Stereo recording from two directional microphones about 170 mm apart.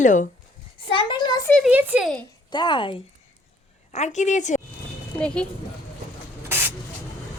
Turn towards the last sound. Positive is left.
turn(degrees=-15)  # may be behind; listen again after turning